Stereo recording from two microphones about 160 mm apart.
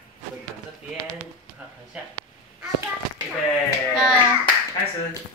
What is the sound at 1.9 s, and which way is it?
Speech, 5° right (ahead or behind).